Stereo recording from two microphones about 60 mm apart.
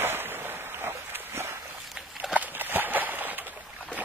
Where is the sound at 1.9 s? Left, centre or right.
Centre.